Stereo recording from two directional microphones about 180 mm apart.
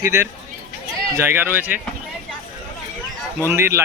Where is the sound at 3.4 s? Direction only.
15° right (ahead or behind).